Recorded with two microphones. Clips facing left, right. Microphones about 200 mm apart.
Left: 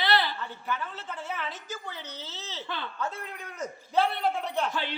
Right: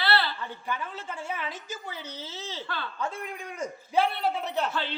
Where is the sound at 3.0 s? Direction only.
10° right (ahead or behind).